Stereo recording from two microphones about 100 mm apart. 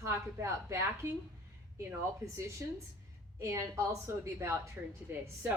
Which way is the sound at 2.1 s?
30° right (ahead or behind).